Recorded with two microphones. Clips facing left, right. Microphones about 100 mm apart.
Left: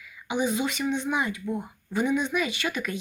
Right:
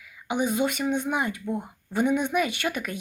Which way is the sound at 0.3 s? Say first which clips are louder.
Right 2 dB; 50° right (ahead or behind).